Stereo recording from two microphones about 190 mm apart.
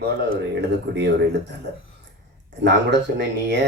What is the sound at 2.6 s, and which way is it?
A man's voice, 65° right (ahead or behind).